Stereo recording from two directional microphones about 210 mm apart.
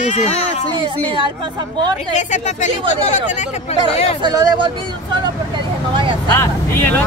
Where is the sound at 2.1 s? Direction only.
35° left (ahead or behind).